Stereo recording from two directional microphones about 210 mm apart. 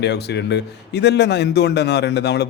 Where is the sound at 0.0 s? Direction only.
55° left (ahead or behind).